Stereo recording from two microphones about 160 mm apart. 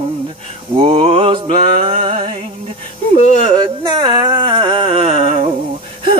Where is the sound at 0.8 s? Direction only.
35° right (ahead or behind).